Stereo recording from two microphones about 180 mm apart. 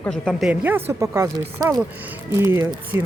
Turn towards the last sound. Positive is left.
turn(degrees=-15)  # may be behind; listen again after turning